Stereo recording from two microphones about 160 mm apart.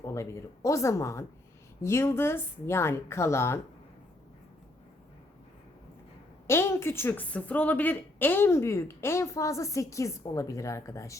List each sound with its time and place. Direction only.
0.0 s a woman's voice: 20° left (ahead or behind)
6.5 s a woman's voice: 15° left (ahead or behind)